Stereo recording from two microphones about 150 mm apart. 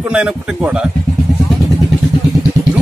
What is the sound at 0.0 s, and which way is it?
Speech, 5° right (ahead or behind).